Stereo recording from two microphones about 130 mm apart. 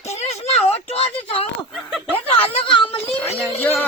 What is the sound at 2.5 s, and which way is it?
Speech, 40° left (ahead or behind).